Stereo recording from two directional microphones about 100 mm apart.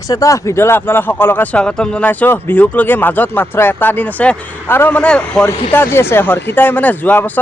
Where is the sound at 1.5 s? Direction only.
10° left (ahead or behind).